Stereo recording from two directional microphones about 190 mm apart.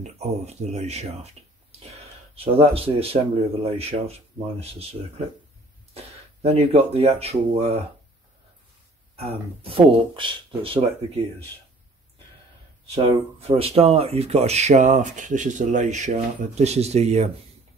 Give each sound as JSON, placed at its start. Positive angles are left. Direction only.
{"t": 0.0, "sound": "speech", "side_deg": -35}
{"t": 6.4, "sound": "speech", "side_deg": -35}
{"t": 9.1, "sound": "speech", "side_deg": -30}
{"t": 12.9, "sound": "speech", "side_deg": -35}